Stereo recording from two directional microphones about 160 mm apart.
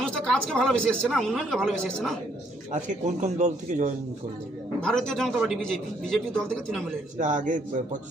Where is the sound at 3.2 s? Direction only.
45° right (ahead or behind).